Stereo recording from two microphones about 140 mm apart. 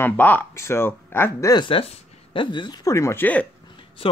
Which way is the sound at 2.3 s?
35° left (ahead or behind).